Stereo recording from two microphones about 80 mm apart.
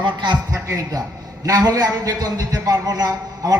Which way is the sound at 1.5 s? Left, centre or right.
Right.